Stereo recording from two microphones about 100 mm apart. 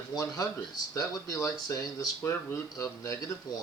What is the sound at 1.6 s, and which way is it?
Speech, 30° left (ahead or behind).